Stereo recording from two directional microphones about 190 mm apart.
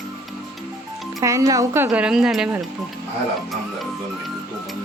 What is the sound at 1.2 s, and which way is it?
Speech, 15° right (ahead or behind).